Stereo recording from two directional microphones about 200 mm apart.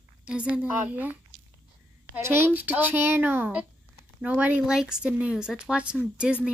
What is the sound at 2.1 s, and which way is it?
A woman's voice, 10° right (ahead or behind).